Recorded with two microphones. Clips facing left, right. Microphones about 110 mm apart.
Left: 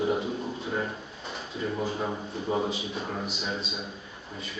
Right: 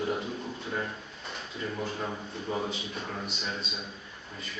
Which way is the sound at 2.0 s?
15° left (ahead or behind).